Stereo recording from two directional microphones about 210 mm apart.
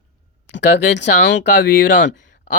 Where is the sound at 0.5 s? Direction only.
55° left (ahead or behind).